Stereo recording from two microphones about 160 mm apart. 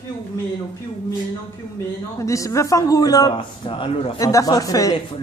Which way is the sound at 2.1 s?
20° left (ahead or behind).